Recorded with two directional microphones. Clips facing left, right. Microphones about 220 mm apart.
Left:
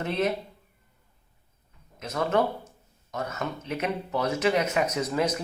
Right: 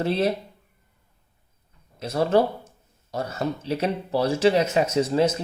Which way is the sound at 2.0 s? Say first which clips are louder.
Right 5 dB; 30° right (ahead or behind).